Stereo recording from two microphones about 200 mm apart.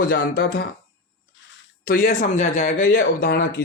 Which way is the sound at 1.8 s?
45° left (ahead or behind).